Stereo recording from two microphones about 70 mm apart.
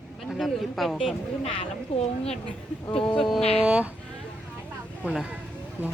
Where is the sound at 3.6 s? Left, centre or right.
Centre.